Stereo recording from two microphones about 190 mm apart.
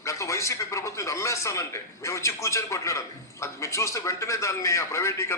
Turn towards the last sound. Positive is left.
turn(degrees=15)  # may be behind; listen again after turning